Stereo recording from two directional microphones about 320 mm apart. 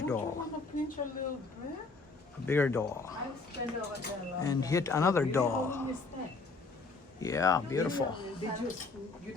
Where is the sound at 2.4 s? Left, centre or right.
Centre.